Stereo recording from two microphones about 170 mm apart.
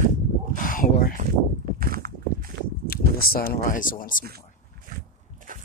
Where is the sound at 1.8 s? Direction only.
60° right (ahead or behind).